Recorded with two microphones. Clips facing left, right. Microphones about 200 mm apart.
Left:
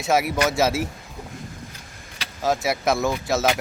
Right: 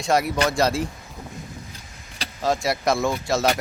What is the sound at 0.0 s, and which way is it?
Speech, 5° left (ahead or behind).